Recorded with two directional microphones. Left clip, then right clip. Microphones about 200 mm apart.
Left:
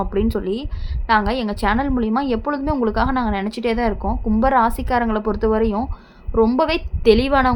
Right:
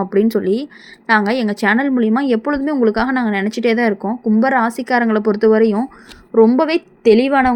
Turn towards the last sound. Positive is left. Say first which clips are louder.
# right 3 dB
turn(degrees=-10)  # may be behind; listen again after turning